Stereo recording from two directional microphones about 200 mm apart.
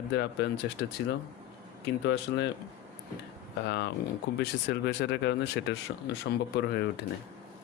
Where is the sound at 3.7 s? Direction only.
60° left (ahead or behind).